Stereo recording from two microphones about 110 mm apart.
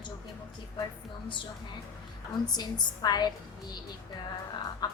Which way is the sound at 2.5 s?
40° left (ahead or behind).